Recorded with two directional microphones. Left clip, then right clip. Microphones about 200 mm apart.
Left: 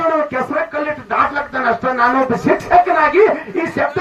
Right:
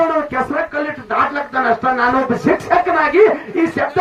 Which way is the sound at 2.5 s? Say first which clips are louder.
Left 3 dB; 50° right (ahead or behind).